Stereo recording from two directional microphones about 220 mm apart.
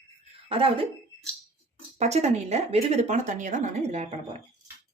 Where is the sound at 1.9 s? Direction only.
30° right (ahead or behind).